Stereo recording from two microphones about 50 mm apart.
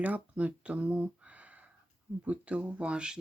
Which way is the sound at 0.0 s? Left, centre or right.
Right.